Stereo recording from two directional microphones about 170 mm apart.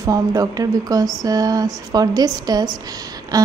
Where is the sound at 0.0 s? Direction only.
20° right (ahead or behind).